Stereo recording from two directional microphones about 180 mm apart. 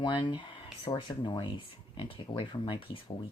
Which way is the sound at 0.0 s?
25° left (ahead or behind).